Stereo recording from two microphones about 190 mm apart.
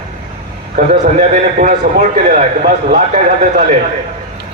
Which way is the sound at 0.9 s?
45° right (ahead or behind).